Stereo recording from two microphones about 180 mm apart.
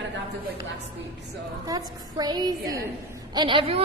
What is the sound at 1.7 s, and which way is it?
A woman's voice, 20° right (ahead or behind).